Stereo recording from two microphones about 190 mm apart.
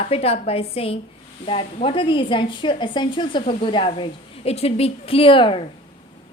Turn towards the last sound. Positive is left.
turn(degrees=25)  # may be behind; listen again after turning